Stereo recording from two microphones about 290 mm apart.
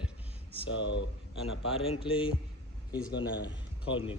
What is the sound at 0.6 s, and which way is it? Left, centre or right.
A man's voice, left.